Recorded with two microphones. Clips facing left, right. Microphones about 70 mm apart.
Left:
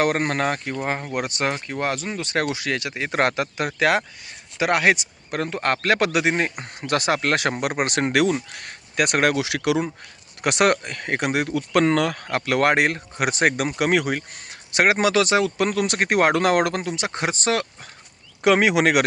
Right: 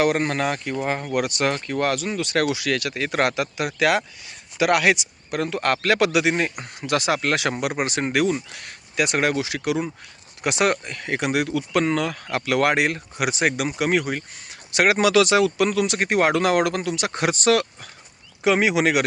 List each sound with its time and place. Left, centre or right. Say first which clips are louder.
0.0 s speech: even; left
1.5 s speech: right 3 dB; centre; by 8.4 s left
8.5 s speech: left 1 dB; left
10.4 s speech: left 2 dB; left
11.8 s speech: left 4 dB; left
14.2 s speech: left 1 dB; left
16.8 s speech: right 2 dB; left
18.4 s speech: left 2 dB; left